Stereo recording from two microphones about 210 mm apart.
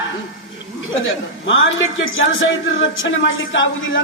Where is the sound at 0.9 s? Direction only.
65° left (ahead or behind).